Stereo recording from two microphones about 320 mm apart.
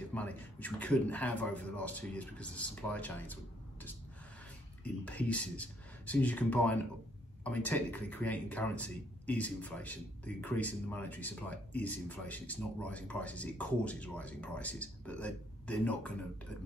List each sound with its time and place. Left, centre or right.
0.1 s speech: centre
4.8 s speech: centre